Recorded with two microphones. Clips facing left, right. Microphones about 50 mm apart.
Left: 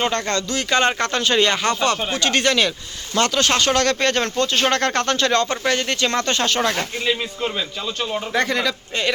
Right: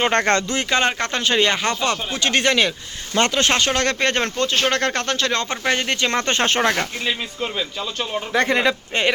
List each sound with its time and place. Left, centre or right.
0.1 s speech: right
0.7 s speech: centre
4.5 s speech: centre; by 6.8 s right
8.1 s speech: centre
8.4 s speech: right